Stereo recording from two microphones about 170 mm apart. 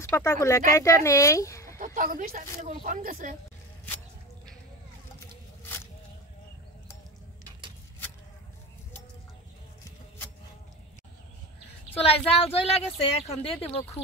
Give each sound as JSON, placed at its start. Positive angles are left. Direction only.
{"t": 0.1, "sound": "speech", "side_deg": 15}
{"t": 2.0, "sound": "speech", "side_deg": -55}
{"t": 12.0, "sound": "speech", "side_deg": 35}